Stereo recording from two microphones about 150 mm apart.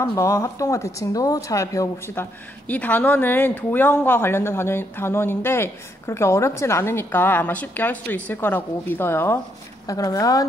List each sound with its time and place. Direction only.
0.0 s speech: 20° left (ahead or behind)
2.7 s speech: 10° left (ahead or behind)